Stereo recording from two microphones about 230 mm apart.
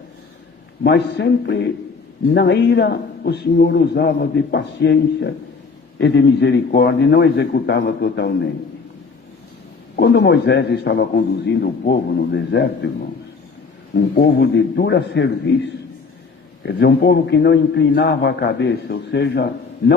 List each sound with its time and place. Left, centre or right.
0.8 s a man's voice: left
9.9 s a man's voice: left
14.2 s a man's voice: left
16.6 s a man's voice: left